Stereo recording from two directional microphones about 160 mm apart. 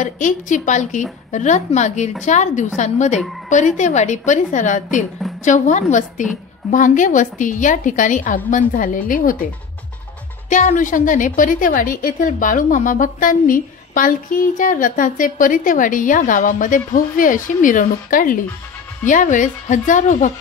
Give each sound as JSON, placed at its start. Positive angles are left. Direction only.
{"t": 0.0, "sound": "a woman's voice", "side_deg": 50}
{"t": 10.5, "sound": "a woman's voice", "side_deg": 50}